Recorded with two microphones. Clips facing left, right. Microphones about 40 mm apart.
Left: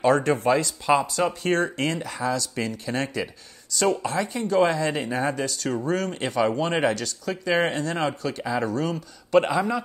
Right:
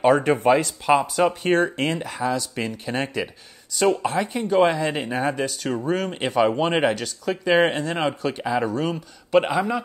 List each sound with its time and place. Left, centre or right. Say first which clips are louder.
0.1 s speech: right 3 dB; centre